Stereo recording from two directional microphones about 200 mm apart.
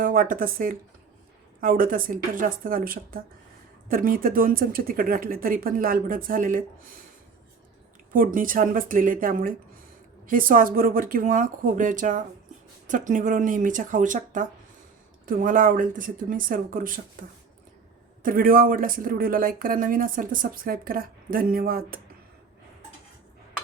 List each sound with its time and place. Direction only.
0.0 s speech: 45° right (ahead or behind)
8.1 s speech: 45° right (ahead or behind)
18.2 s speech: 45° right (ahead or behind)